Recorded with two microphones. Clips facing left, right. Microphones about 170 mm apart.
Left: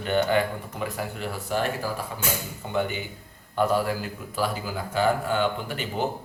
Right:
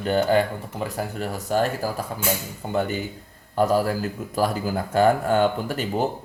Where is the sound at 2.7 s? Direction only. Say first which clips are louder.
Right 3 dB; 40° right (ahead or behind).